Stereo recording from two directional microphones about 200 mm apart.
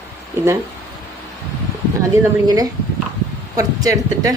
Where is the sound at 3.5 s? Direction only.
15° right (ahead or behind).